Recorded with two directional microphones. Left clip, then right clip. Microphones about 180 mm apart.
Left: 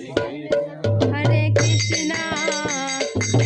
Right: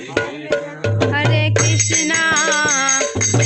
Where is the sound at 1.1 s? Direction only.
15° left (ahead or behind).